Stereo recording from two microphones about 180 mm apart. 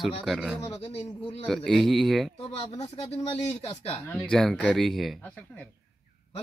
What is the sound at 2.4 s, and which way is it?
Speech, 35° left (ahead or behind).